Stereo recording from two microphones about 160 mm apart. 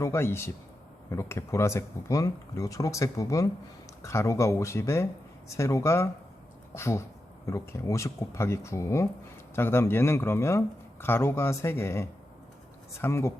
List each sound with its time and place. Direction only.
0.0 s speech: 15° left (ahead or behind)